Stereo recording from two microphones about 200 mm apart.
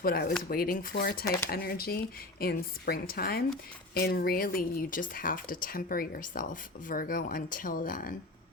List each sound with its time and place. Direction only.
0.0 s speech: 50° left (ahead or behind)